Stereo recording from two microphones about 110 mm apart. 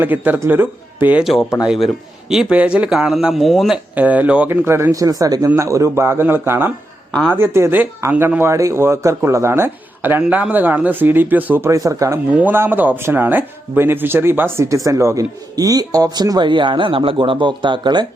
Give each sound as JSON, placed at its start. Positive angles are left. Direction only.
{"t": 0.0, "sound": "speech", "side_deg": -15}
{"t": 1.2, "sound": "speech", "side_deg": 0}
{"t": 3.9, "sound": "a man's voice", "side_deg": -15}
{"t": 7.1, "sound": "speech", "side_deg": 10}
{"t": 7.3, "sound": "a man's voice", "side_deg": -20}
{"t": 12.4, "sound": "speech", "side_deg": -15}